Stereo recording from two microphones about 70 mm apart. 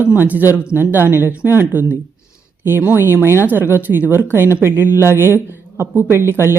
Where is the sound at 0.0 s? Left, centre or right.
Right.